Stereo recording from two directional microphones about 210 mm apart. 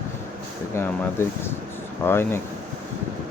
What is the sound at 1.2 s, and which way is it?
Speech, 10° left (ahead or behind).